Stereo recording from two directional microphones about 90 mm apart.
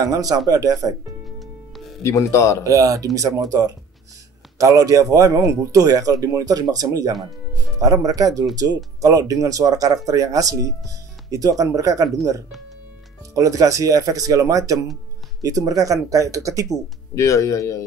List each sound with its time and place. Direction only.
0.0 s speech: 45° right (ahead or behind)
2.0 s speech: 35° left (ahead or behind)
2.6 s speech: 40° right (ahead or behind)
13.3 s speech: 40° right (ahead or behind)
17.1 s speech: 35° left (ahead or behind)